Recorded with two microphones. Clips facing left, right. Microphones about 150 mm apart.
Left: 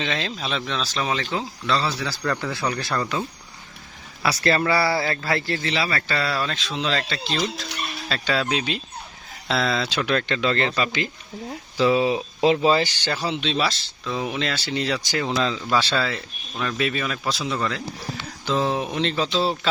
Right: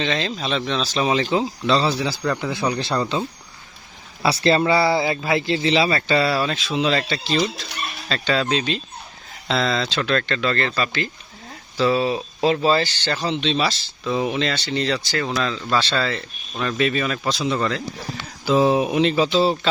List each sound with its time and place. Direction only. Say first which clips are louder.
0.0 s speech: right 4 dB; centre (ahead or behind)
0.9 s a man's voice: right 7 dB; 20° right (ahead or behind); by 17.8 s centre (ahead or behind)
18.4 s a man's voice: right 6 dB; 10° right (ahead or behind)